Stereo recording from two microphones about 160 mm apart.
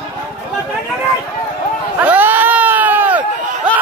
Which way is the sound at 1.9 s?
10° right (ahead or behind).